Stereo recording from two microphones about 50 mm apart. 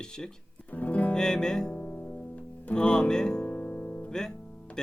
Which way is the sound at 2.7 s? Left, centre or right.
Centre.